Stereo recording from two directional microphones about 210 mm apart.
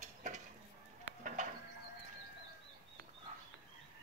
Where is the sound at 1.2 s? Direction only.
40° right (ahead or behind).